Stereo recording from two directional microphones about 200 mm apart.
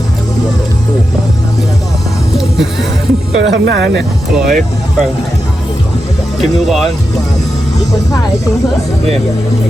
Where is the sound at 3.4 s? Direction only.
65° right (ahead or behind).